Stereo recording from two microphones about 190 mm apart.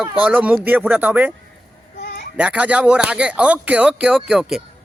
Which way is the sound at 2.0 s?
45° left (ahead or behind).